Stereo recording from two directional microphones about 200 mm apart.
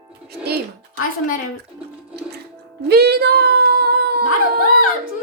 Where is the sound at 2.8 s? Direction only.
55° right (ahead or behind).